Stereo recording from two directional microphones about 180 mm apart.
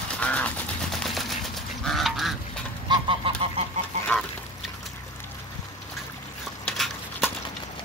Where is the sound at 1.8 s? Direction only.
Centre (ahead or behind).